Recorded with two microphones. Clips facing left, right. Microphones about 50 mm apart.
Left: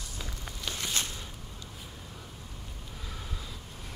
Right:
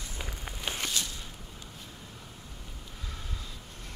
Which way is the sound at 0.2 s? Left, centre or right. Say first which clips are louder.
Right 2 dB; right.